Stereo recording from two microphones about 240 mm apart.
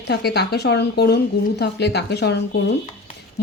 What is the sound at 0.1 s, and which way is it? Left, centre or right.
Speech, left.